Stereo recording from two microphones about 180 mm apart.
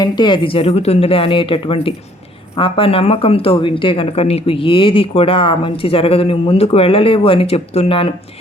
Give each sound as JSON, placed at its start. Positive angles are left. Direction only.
{"t": 0.0, "sound": "speech", "side_deg": 25}